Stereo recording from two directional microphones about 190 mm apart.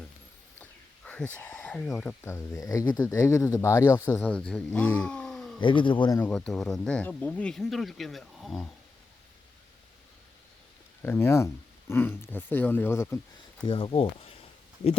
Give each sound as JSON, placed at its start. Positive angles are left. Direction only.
{"t": 0.6, "sound": "speech", "side_deg": 5}
{"t": 5.5, "sound": "speech", "side_deg": 25}
{"t": 6.3, "sound": "speech", "side_deg": 0}
{"t": 11.0, "sound": "speech", "side_deg": 15}
{"t": 13.7, "sound": "speech", "side_deg": 30}